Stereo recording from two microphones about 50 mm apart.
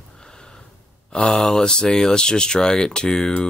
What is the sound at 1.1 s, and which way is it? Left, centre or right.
Speech, centre.